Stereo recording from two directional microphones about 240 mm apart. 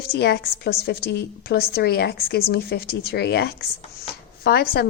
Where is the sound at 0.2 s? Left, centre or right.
Left.